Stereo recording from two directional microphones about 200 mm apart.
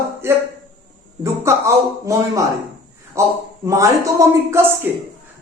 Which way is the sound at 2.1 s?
15° right (ahead or behind).